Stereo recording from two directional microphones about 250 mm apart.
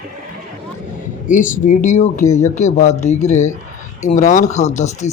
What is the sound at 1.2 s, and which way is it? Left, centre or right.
Speech, left.